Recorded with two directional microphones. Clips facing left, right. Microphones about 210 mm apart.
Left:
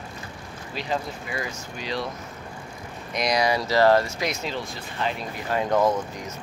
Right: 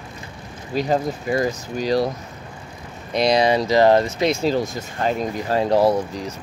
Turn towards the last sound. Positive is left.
turn(degrees=-35)  # may be behind; listen again after turning